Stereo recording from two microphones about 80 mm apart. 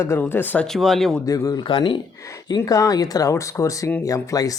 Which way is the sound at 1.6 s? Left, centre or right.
Left.